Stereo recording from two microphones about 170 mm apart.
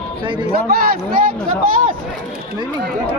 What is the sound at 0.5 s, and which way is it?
Speech, 60° right (ahead or behind).